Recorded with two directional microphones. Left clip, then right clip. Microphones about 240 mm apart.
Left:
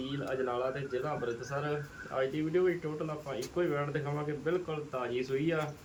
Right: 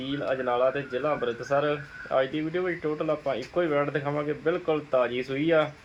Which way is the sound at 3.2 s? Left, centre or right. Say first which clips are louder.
Right 7 dB; right.